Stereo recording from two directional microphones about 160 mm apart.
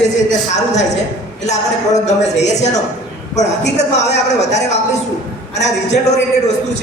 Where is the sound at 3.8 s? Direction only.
45° left (ahead or behind).